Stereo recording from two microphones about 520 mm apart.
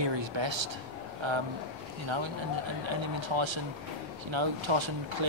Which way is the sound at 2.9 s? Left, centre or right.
Right.